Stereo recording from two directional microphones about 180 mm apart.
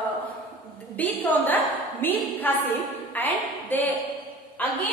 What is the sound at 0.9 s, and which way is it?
A woman's voice, 10° left (ahead or behind).